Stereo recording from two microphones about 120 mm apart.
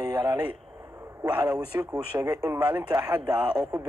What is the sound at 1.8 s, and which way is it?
Speech, 25° right (ahead or behind).